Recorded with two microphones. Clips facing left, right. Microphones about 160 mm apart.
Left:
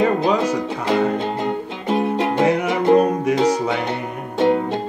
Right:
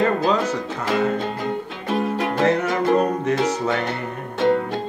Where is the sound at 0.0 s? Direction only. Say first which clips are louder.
Left 2 dB; 10° left (ahead or behind).